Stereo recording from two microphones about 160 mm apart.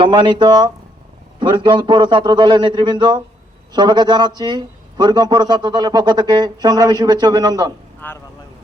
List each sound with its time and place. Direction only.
0.0 s a man's voice: 30° right (ahead or behind)
8.0 s speech: 10° left (ahead or behind)